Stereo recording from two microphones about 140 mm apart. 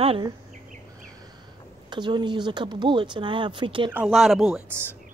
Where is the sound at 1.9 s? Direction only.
35° right (ahead or behind).